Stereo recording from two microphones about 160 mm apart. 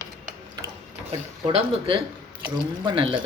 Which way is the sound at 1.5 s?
35° right (ahead or behind).